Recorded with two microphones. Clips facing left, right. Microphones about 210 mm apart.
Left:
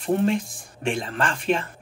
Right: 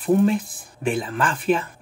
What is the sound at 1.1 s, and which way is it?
Speech, 30° left (ahead or behind).